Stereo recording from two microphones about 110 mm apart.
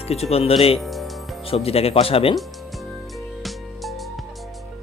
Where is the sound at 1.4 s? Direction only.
65° left (ahead or behind).